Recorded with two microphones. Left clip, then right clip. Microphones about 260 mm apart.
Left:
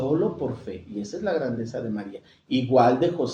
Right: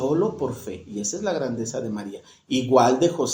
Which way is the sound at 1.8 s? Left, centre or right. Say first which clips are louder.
Right 2 dB; right.